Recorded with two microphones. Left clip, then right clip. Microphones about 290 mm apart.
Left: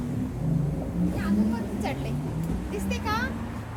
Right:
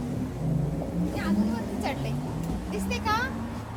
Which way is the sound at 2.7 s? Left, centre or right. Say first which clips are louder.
Right 2 dB; centre.